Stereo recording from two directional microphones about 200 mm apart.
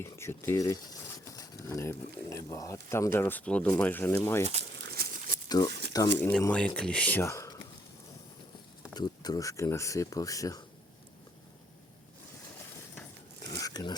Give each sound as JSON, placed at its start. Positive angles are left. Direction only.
{"t": 0.0, "sound": "speech", "side_deg": 10}
{"t": 5.0, "sound": "crumpling", "side_deg": -50}
{"t": 5.6, "sound": "speech", "side_deg": 25}
{"t": 6.1, "sound": "speech", "side_deg": 10}
{"t": 8.9, "sound": "speech", "side_deg": 20}
{"t": 13.4, "sound": "a sound", "side_deg": 20}